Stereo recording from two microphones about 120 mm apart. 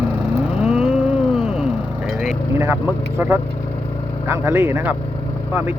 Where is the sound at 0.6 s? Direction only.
5° right (ahead or behind).